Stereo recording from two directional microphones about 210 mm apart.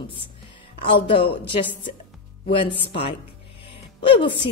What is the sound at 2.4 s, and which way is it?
Speech, 25° left (ahead or behind).